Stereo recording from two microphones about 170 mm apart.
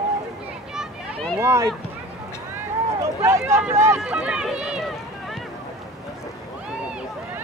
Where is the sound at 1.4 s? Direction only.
15° right (ahead or behind).